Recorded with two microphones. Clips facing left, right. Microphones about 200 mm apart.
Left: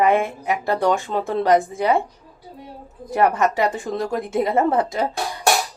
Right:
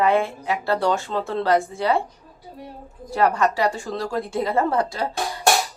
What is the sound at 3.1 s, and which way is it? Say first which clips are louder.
A woman's voice: left 2 dB; 20° left (ahead or behind).